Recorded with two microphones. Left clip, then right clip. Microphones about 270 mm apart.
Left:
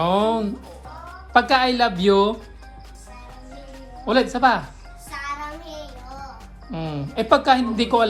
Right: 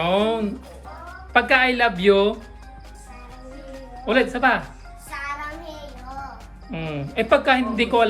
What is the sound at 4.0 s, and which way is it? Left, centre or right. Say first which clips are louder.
Speech: left 1 dB; centre.